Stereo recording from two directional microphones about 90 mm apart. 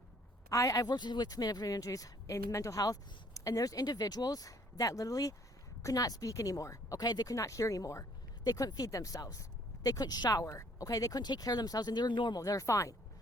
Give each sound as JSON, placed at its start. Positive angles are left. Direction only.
{"t": 0.5, "sound": "speech", "side_deg": 40}
{"t": 12.4, "sound": "speech", "side_deg": 40}